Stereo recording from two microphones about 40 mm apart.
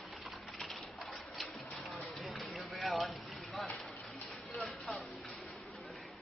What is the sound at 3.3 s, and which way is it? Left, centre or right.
Vehicle, centre.